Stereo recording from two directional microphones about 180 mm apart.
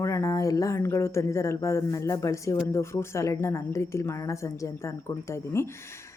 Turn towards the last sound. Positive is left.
turn(degrees=15)  # may be behind; listen again after turning